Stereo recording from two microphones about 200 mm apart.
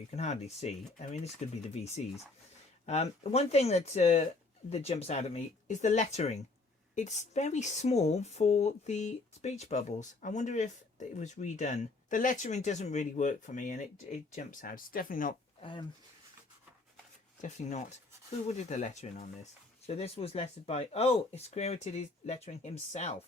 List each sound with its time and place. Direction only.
0.2 s speech: 35° left (ahead or behind)
15.6 s speech: 25° left (ahead or behind)
17.4 s speech: 40° left (ahead or behind)